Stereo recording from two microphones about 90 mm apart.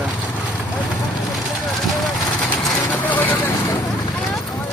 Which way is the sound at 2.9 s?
20° left (ahead or behind).